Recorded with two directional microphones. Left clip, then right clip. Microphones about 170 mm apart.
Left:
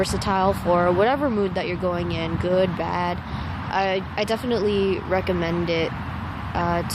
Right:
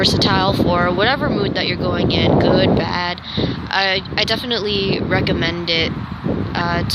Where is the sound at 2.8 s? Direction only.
10° left (ahead or behind).